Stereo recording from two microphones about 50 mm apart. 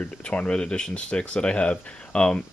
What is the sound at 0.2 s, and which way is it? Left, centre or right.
Speech, left.